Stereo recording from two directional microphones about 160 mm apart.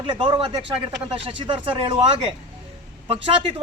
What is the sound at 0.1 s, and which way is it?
Speech, 30° right (ahead or behind).